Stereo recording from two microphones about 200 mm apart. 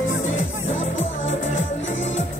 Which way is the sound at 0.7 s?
40° left (ahead or behind).